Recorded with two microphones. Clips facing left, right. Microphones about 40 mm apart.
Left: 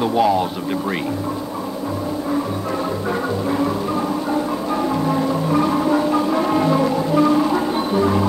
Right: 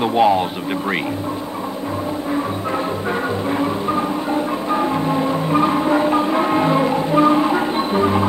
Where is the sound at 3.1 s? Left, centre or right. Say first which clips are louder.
Even; right.